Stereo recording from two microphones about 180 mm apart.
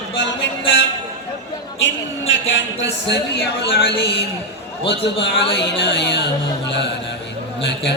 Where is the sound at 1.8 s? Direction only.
90° left.